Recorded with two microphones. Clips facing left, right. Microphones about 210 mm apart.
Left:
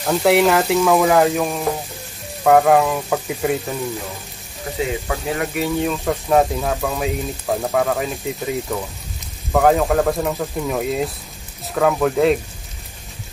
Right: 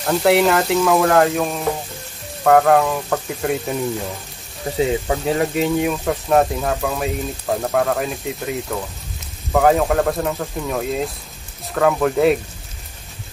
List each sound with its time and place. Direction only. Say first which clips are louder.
0.0 s speech: even; centre (ahead or behind)
4.7 s speech: right 4 dB; 30° right (ahead or behind)
6.0 s speech: left 2 dB; centre (ahead or behind)